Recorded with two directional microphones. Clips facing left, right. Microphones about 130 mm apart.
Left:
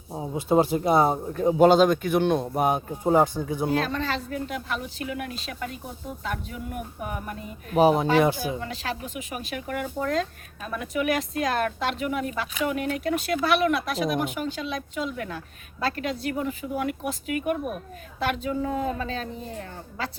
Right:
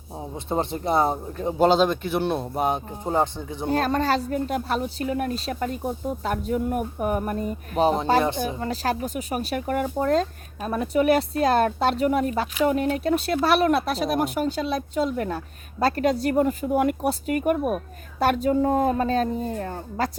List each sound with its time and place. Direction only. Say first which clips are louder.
0.1 s a man's voice: left 5 dB; 5° left (ahead or behind)
3.7 s speech: right 8 dB; 45° right (ahead or behind)
7.7 s speech: left 3 dB; 5° left (ahead or behind)
8.4 s speech: right 4 dB; 40° right (ahead or behind)